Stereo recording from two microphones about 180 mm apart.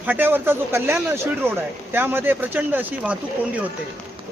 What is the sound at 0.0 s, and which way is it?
Speech, 10° right (ahead or behind).